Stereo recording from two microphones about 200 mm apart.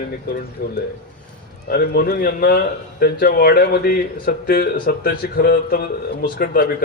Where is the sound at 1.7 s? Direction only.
50° left (ahead or behind).